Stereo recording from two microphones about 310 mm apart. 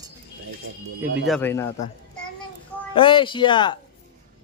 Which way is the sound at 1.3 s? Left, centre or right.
Centre.